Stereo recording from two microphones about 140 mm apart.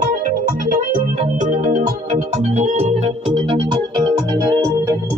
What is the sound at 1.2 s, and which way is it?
Organ, 60° right (ahead or behind).